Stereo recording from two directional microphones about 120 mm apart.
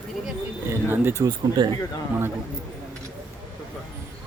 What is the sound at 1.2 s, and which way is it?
Speech, 40° right (ahead or behind).